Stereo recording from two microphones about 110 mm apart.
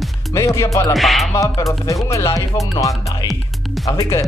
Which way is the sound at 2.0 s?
30° left (ahead or behind).